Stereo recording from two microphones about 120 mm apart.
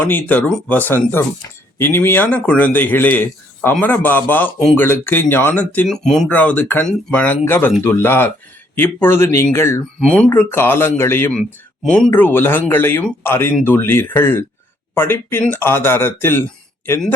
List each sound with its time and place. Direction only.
0.0 s a man's voice: 15° left (ahead or behind)
5.9 s speech: 5° left (ahead or behind)
6.2 s a man's voice: 15° left (ahead or behind)
11.3 s a man's voice: 5° left (ahead or behind)